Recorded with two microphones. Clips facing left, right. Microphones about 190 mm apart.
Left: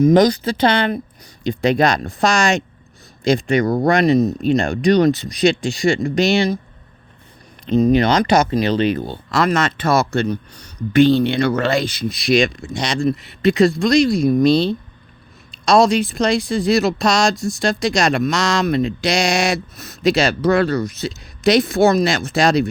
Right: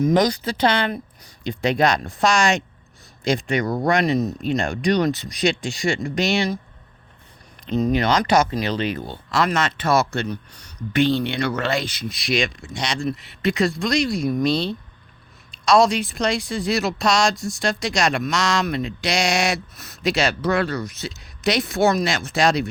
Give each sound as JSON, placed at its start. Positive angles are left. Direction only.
{"t": 0.0, "sound": "speech", "side_deg": 30}
{"t": 1.5, "sound": "speech", "side_deg": 40}
{"t": 7.7, "sound": "speech", "side_deg": 20}
{"t": 9.3, "sound": "speech", "side_deg": 45}